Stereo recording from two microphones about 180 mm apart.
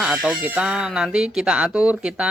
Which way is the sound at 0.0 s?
5° right (ahead or behind).